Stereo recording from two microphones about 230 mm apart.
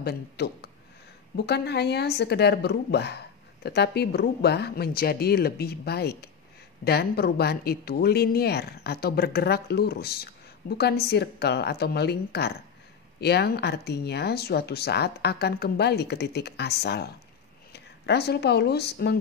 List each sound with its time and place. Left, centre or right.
0.0 s speech: left